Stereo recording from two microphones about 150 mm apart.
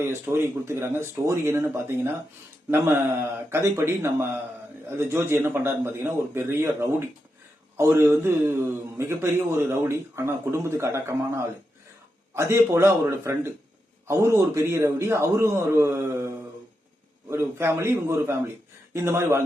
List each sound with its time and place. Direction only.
0.0 s a man's voice: 15° right (ahead or behind)